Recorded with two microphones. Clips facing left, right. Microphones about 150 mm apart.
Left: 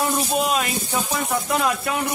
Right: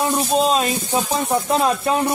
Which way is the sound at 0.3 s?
30° right (ahead or behind).